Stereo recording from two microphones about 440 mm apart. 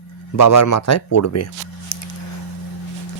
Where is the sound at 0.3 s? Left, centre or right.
Left.